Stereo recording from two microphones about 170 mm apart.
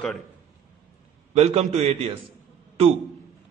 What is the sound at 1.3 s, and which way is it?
Speech, 40° right (ahead or behind).